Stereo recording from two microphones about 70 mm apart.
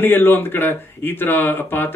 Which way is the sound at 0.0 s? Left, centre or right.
Left.